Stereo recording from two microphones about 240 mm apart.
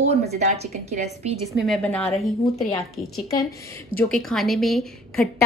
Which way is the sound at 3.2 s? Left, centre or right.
Centre.